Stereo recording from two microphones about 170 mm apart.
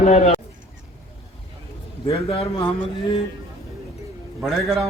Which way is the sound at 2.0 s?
35° left (ahead or behind).